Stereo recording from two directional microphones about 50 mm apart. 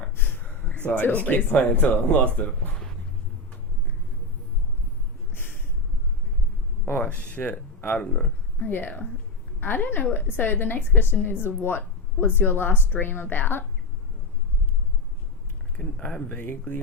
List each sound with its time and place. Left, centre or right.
0.2 s a sound: left
1.5 s speech: left
5.3 s a sound: left
7.0 s speech: left
8.6 s a woman's voice: left
15.8 s speech: left